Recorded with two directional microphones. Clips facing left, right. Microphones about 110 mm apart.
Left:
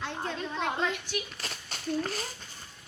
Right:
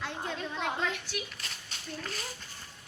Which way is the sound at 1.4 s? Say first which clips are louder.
Left 4 dB; 40° left (ahead or behind).